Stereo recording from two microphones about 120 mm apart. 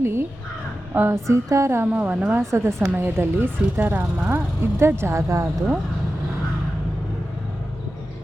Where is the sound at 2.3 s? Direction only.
25° right (ahead or behind).